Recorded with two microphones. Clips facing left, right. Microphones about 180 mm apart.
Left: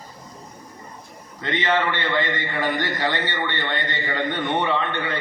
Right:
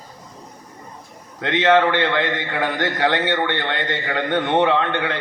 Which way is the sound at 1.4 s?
65° right (ahead or behind).